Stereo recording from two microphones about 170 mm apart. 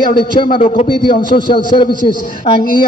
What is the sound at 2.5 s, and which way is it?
Speech, 55° left (ahead or behind).